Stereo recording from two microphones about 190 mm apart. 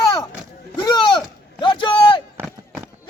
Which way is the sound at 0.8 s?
20° left (ahead or behind).